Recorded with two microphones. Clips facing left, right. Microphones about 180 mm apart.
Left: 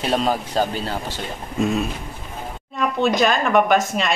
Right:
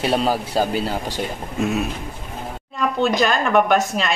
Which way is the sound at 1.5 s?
Centre (ahead or behind).